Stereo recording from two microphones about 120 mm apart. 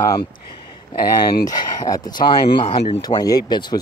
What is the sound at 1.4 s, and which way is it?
Speech, 30° left (ahead or behind).